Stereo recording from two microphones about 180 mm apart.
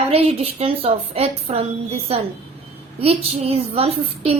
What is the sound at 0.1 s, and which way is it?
Speech, 30° right (ahead or behind).